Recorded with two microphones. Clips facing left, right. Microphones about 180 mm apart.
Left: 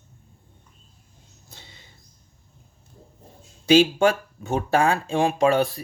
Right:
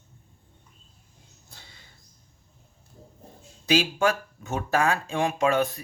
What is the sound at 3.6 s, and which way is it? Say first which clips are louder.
Speech: left 6 dB; 30° left (ahead or behind).